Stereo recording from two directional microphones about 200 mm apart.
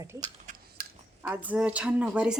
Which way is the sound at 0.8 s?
50° right (ahead or behind).